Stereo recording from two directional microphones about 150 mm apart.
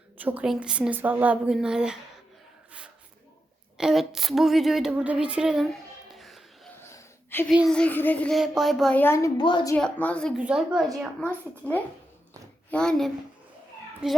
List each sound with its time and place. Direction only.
0.2 s a woman's voice: 10° right (ahead or behind)
3.8 s a woman's voice: 5° right (ahead or behind)
6.1 s a sound: centre (ahead or behind)
6.7 s wheeze: 15° left (ahead or behind)
7.5 s a woman's voice: 5° right (ahead or behind)
7.8 s a woman's voice: 10° left (ahead or behind)
8.4 s a woman's voice: centre (ahead or behind)
9.0 s a woman's voice: 15° left (ahead or behind)
9.4 s a woman's voice: 30° left (ahead or behind)
9.7 s a woman's voice: 10° left (ahead or behind)
10.3 s a woman's voice: 5° right (ahead or behind)
11.6 s a woman's voice: 10° left (ahead or behind)
14.0 s a woman's voice: 5° right (ahead or behind)